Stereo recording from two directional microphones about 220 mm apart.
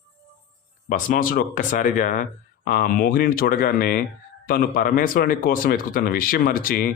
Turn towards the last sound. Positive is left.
turn(degrees=40)  # may be behind; listen again after turning